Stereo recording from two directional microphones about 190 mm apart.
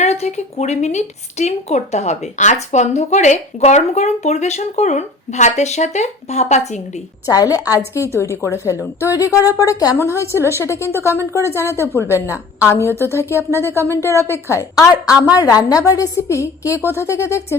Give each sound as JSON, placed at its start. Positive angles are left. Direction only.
{"t": 0.0, "sound": "speech", "side_deg": 35}
{"t": 7.3, "sound": "a woman's voice", "side_deg": 20}